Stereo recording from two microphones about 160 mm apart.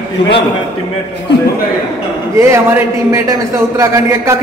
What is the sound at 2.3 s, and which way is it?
A man's voice, 15° right (ahead or behind).